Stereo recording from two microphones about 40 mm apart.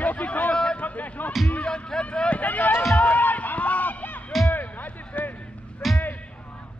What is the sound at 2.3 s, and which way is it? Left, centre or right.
Run, left.